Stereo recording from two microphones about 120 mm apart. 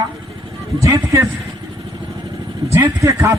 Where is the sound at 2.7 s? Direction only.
25° right (ahead or behind).